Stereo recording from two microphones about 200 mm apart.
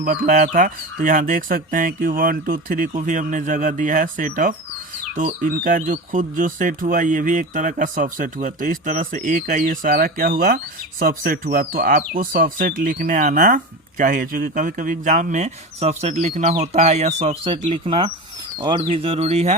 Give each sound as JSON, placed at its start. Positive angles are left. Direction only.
{"t": 0.0, "sound": "speech", "side_deg": -40}